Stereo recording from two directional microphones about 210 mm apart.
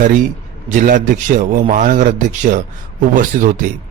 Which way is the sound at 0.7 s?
40° right (ahead or behind).